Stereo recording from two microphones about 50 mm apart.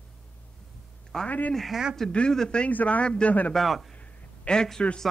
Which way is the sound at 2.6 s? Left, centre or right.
Left.